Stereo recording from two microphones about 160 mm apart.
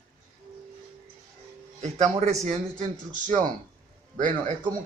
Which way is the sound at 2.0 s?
45° right (ahead or behind).